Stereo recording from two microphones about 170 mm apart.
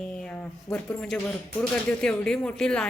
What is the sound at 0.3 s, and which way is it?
Speech, 5° left (ahead or behind).